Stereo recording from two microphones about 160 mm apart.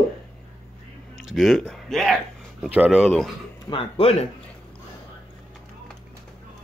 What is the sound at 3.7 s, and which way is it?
Speech, 35° left (ahead or behind).